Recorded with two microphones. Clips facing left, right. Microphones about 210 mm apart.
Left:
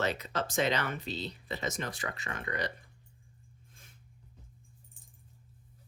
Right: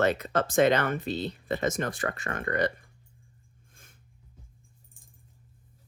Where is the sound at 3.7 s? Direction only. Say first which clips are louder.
Right 2 dB; 50° right (ahead or behind).